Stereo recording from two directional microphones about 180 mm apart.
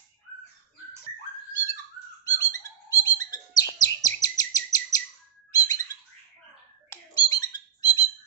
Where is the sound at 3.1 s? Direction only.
20° left (ahead or behind).